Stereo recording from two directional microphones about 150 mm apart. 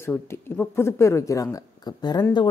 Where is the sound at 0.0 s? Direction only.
15° left (ahead or behind).